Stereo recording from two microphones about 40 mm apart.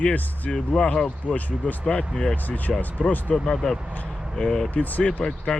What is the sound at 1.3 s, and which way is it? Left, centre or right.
Speech, left.